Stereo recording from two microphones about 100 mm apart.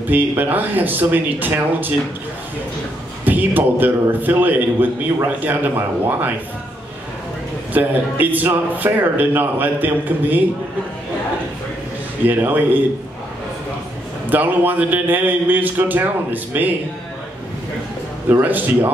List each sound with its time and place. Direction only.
0.1 s speech: 20° right (ahead or behind)
3.3 s speech: 20° right (ahead or behind)
7.7 s a man's voice: 15° right (ahead or behind)
12.3 s a man's voice: 20° right (ahead or behind)
14.3 s a man's voice: 20° right (ahead or behind)
18.3 s speech: 20° right (ahead or behind)